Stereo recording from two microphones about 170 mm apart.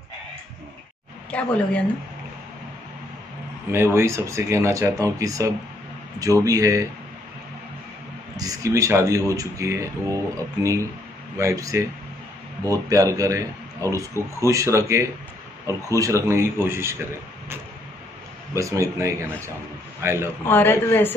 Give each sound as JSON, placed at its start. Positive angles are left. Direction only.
{"t": 1.3, "sound": "speech", "side_deg": 10}
{"t": 3.7, "sound": "a man's voice", "side_deg": -15}
{"t": 8.4, "sound": "speech", "side_deg": -20}
{"t": 18.5, "sound": "speech", "side_deg": -20}
{"t": 20.4, "sound": "speech", "side_deg": 15}